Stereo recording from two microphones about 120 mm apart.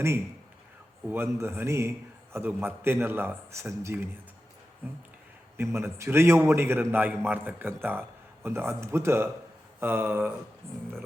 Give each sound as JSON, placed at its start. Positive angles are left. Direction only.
{"t": 1.0, "sound": "a man's voice", "side_deg": -20}
{"t": 5.5, "sound": "a man's voice", "side_deg": -20}